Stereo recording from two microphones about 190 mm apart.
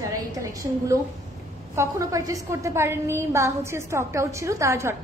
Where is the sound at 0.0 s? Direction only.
20° right (ahead or behind).